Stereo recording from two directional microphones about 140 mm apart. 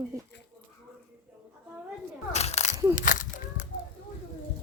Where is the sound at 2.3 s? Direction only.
50° left (ahead or behind).